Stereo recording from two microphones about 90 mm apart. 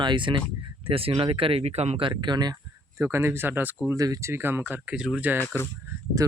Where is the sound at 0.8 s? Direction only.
90° right; by 2.6 s 50° right (ahead or behind).